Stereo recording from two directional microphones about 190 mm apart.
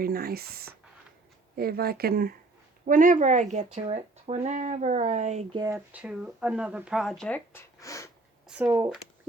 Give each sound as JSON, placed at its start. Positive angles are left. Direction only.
{"t": 0.0, "sound": "speech", "side_deg": -55}
{"t": 5.5, "sound": "speech", "side_deg": -15}
{"t": 8.4, "sound": "speech", "side_deg": -10}